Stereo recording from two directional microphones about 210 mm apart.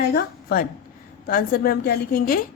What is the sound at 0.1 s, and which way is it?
A woman's voice, 45° left (ahead or behind).